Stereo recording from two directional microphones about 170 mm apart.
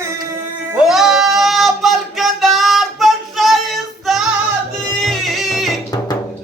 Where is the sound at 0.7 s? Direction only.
Centre (ahead or behind).